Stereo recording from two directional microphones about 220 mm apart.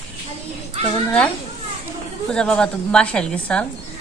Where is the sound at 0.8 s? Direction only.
30° right (ahead or behind).